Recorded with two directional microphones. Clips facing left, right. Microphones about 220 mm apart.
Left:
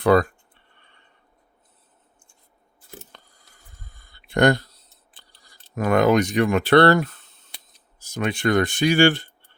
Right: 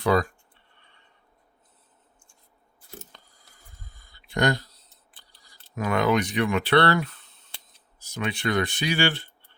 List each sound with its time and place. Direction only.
0.0 s speech: 60° left (ahead or behind)
3.9 s a sound: 60° left (ahead or behind)
5.7 s speech: 45° left (ahead or behind)